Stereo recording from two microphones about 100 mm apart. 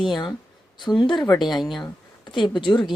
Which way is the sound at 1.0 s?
50° left (ahead or behind).